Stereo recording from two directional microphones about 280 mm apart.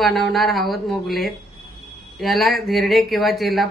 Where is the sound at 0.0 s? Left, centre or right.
Centre.